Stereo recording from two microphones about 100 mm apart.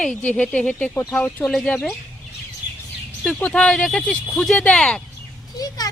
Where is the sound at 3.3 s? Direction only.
10° left (ahead or behind).